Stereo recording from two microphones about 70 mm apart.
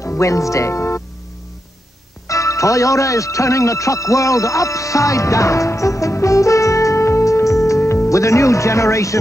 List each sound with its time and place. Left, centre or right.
0.0 s speech: left
2.2 s speech: left